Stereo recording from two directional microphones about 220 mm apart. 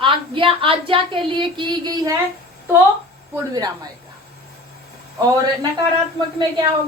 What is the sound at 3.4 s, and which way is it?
Speech, 15° right (ahead or behind).